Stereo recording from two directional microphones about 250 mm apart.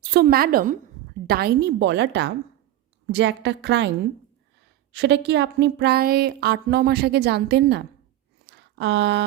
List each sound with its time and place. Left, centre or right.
0.0 s a woman's voice: right
4.9 s speech: right
8.4 s a sound: right